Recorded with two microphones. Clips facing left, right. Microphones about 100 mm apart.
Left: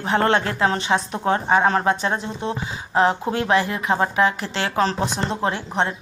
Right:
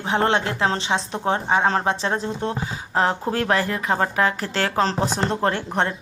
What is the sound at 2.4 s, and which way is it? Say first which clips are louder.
Speech: even; 50° right (ahead or behind).